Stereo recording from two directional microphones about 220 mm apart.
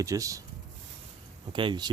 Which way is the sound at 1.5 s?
20° right (ahead or behind).